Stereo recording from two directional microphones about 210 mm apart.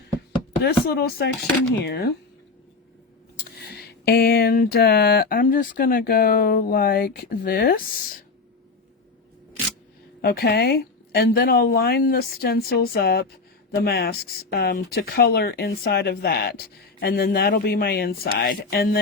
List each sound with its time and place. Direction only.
0.6 s a woman's voice: 50° left (ahead or behind)
3.5 s a woman's voice: 50° left (ahead or behind)
10.2 s a woman's voice: 50° left (ahead or behind)